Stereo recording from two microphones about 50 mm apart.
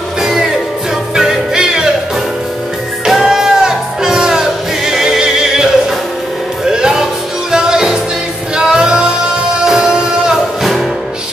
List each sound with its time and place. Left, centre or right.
0.2 s music: centre
3.1 s music: centre
10.6 s music: centre